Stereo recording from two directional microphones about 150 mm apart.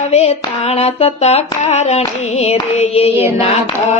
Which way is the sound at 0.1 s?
45° left (ahead or behind).